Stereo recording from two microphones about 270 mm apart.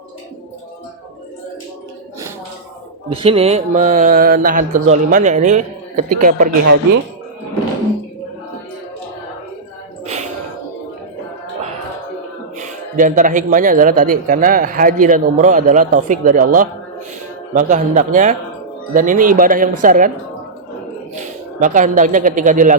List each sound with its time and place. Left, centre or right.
3.1 s speech: right
12.5 s speech: right
21.2 s speech: right